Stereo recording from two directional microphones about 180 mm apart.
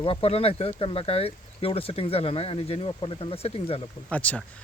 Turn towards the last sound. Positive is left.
turn(degrees=5)  # may be behind; listen again after turning